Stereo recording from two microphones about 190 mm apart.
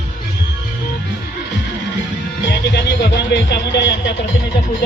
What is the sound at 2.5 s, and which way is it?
Music, 60° left (ahead or behind).